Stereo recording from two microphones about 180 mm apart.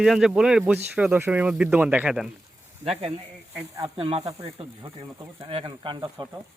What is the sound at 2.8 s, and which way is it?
Speech, 35° right (ahead or behind).